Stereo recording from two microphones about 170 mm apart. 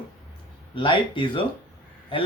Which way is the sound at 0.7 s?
30° left (ahead or behind).